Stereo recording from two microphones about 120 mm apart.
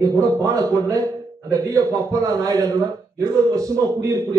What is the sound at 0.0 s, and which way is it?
A man's voice, 30° right (ahead or behind).